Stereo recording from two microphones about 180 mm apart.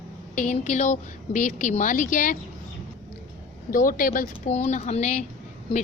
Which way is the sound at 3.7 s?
50° left (ahead or behind).